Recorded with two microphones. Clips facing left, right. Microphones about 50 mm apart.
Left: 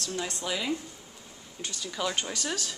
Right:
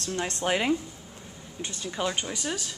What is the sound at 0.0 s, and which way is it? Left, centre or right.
Speech, right.